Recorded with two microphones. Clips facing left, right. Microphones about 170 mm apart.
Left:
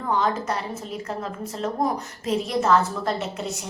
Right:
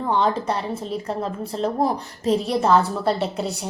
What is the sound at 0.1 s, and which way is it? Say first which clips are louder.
A woman's voice: right 2 dB; 30° right (ahead or behind).